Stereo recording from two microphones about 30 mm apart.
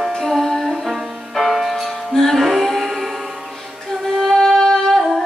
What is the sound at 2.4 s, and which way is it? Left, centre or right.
Music, centre.